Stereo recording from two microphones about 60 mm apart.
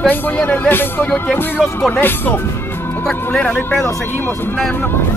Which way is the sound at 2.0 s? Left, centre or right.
Left.